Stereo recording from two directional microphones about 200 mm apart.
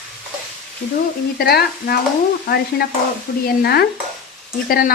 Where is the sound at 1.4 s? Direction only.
55° left (ahead or behind).